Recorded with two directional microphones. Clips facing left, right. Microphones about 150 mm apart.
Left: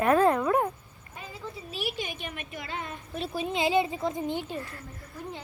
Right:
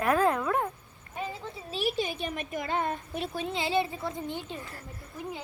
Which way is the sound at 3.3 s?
15° left (ahead or behind).